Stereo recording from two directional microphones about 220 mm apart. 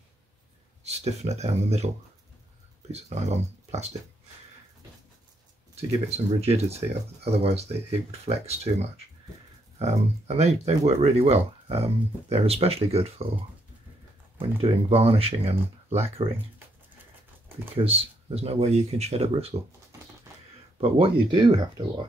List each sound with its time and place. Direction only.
0.8 s speech: 30° right (ahead or behind)
2.9 s speech: 30° right (ahead or behind)
5.8 s speech: 30° right (ahead or behind)
14.4 s speech: 25° right (ahead or behind)
17.7 s speech: 25° right (ahead or behind)
20.8 s speech: 20° right (ahead or behind)